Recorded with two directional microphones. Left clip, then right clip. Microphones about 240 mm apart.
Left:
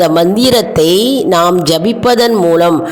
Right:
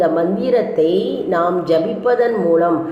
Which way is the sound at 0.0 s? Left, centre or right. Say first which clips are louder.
Left 7 dB; left.